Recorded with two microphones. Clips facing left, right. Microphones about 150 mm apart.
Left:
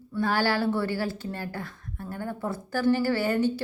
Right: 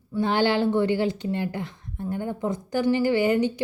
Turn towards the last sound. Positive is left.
turn(degrees=-15)  # may be behind; listen again after turning